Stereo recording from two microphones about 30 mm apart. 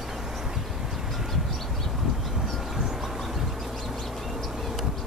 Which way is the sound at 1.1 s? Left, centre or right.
Centre.